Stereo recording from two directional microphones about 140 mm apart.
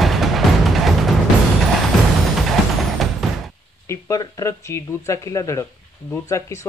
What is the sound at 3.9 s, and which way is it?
Speech, 25° left (ahead or behind).